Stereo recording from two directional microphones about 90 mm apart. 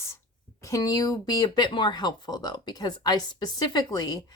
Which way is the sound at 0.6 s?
40° left (ahead or behind).